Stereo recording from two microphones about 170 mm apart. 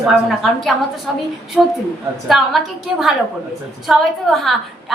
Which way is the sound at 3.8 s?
Centre (ahead or behind).